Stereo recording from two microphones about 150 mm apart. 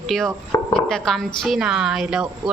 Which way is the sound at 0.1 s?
Centre (ahead or behind).